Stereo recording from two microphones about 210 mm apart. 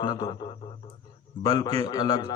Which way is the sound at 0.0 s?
20° left (ahead or behind).